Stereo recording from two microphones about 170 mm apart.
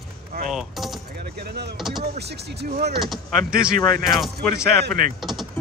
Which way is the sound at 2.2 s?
75° right (ahead or behind).